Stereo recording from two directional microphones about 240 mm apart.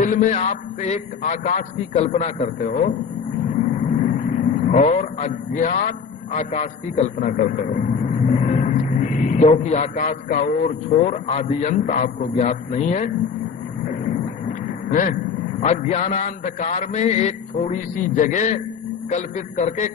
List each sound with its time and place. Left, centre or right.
0.0 s a man's voice: left
4.0 s speech: left
14.9 s a man's voice: left